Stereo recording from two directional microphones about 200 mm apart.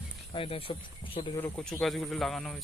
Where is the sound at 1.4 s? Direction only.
5° left (ahead or behind).